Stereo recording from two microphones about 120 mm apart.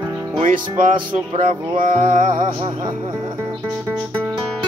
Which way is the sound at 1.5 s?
90° right.